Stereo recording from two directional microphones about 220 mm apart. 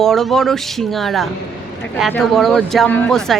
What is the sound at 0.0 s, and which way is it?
Speech, centre (ahead or behind).